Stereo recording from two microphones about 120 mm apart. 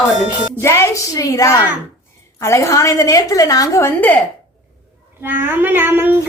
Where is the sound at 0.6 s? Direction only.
25° left (ahead or behind).